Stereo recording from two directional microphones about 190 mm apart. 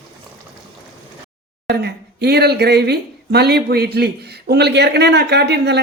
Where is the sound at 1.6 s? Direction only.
60° right (ahead or behind).